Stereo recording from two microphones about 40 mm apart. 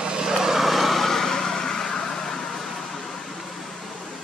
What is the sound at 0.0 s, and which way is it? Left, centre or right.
Vehicle, centre.